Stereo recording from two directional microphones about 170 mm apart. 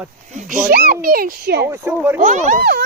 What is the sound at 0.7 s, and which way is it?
Speech, 60° right (ahead or behind).